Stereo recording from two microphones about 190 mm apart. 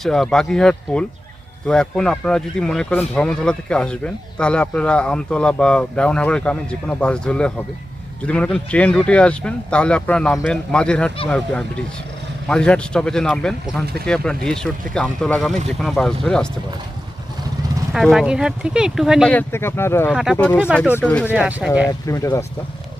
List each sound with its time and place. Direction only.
0.0 s speech: centre (ahead or behind)
17.9 s speech: centre (ahead or behind)
19.3 s speech: 10° left (ahead or behind)
21.2 s speech: 5° right (ahead or behind)
21.8 s speech: 15° left (ahead or behind)